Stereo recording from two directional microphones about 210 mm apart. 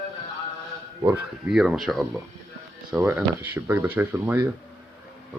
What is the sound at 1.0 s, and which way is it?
Speech, 5° right (ahead or behind).